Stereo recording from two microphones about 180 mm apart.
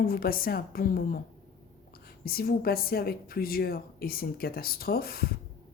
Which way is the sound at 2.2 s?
55° left (ahead or behind).